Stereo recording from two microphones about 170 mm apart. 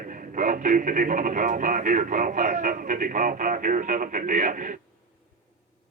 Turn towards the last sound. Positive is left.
turn(degrees=-50)  # may be behind; listen again after turning